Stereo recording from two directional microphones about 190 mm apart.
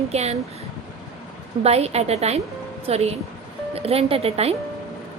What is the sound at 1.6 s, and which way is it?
A woman's voice, 35° right (ahead or behind).